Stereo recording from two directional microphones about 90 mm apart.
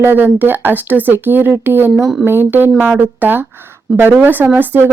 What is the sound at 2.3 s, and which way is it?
Speech, 25° right (ahead or behind).